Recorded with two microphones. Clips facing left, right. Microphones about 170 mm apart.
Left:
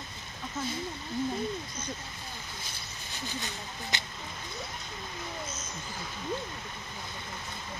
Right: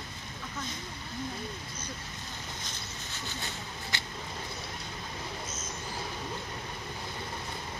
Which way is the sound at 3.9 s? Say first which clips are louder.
Left 2 dB; 20° left (ahead or behind).